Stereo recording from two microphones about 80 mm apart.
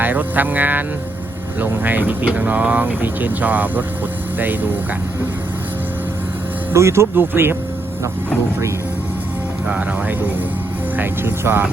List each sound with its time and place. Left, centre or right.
0.0 s speech: right
6.7 s speech: right
9.6 s speech: centre